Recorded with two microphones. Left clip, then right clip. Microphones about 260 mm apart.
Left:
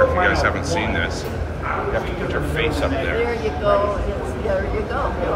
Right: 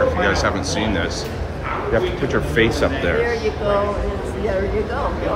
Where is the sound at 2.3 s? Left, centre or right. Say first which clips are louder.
Right 3 dB; right.